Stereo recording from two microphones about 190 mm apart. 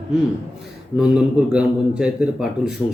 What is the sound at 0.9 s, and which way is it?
A man's voice, 5° right (ahead or behind).